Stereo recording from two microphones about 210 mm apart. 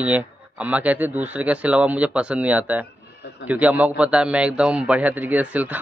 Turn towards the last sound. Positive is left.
turn(degrees=-5)  # may be behind; listen again after turning